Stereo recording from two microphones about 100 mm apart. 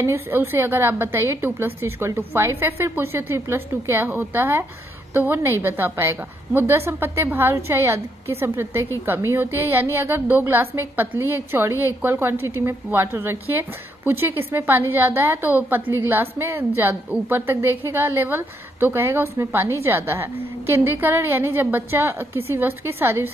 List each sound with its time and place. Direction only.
0.0 s a woman's voice: 25° right (ahead or behind)